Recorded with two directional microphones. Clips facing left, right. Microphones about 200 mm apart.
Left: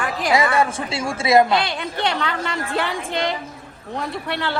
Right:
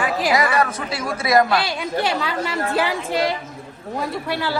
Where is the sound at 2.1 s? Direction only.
5° right (ahead or behind).